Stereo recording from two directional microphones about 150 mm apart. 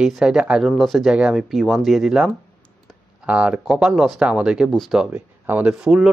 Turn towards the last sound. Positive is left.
turn(degrees=-5)  # may be behind; listen again after turning